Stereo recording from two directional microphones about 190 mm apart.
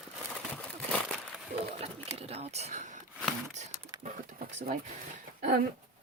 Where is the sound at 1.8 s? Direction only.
30° right (ahead or behind).